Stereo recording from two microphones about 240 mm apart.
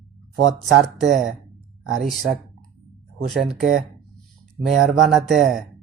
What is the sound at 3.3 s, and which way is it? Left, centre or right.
Speech, centre.